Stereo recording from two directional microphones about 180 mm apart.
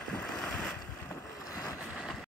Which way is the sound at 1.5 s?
20° left (ahead or behind).